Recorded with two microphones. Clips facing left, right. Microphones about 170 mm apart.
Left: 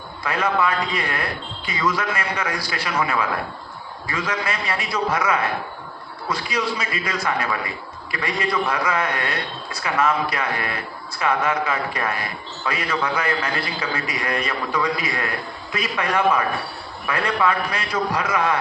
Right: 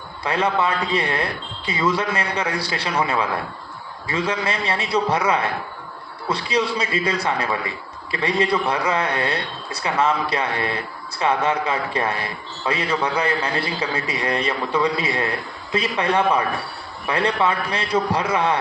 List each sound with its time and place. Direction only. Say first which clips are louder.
0.2 s a man's voice: right 1 dB; 30° right (ahead or behind)